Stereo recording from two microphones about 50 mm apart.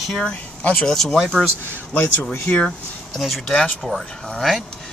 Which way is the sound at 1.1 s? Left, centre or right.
Centre.